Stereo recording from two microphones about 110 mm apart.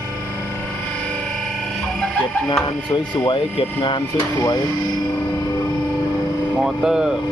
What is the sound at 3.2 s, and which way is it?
Speech, 50° left (ahead or behind).